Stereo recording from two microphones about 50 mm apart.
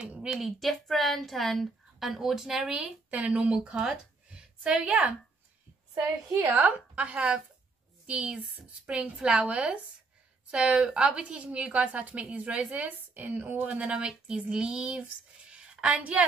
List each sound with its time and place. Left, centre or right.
0.2 s a woman's voice: centre
3.1 s a woman's voice: right
6.4 s a woman's voice: right
12.7 s speech: right
13.7 s a woman's voice: right
15.5 s a sound: centre